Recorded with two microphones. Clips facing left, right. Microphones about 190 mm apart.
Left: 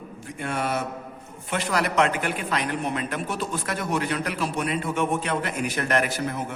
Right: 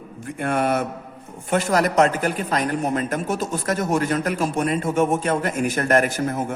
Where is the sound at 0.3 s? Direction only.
55° right (ahead or behind).